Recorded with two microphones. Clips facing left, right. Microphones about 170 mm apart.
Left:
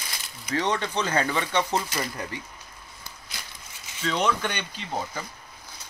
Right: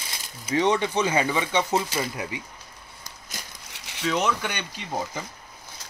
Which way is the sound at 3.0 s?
45° right (ahead or behind).